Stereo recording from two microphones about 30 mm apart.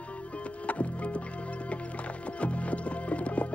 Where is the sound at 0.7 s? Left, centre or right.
Left.